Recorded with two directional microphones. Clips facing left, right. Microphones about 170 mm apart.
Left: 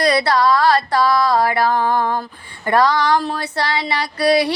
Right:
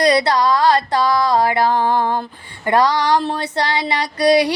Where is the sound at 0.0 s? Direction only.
20° right (ahead or behind).